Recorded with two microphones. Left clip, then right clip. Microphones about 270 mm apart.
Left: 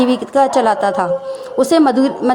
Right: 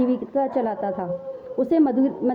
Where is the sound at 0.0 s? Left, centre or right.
Centre.